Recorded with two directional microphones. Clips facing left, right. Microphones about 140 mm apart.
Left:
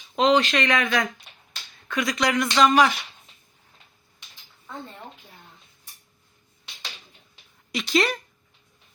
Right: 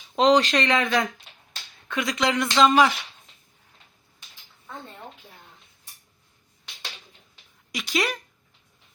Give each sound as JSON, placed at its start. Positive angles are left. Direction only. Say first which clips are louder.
{"t": 0.2, "sound": "speech", "louder": "right 1 dB", "side_deg": -35}
{"t": 7.7, "sound": "speech", "louder": "left 4 dB", "side_deg": -10}